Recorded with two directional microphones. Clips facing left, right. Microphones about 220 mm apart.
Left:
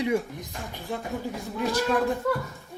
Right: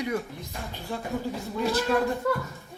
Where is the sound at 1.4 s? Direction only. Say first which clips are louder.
Left 1 dB; 15° left (ahead or behind).